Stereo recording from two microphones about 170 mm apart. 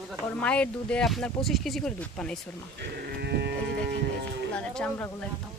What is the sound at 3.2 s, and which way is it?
Cattle, 75° right (ahead or behind).